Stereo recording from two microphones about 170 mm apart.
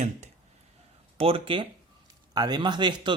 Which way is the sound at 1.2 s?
30° right (ahead or behind).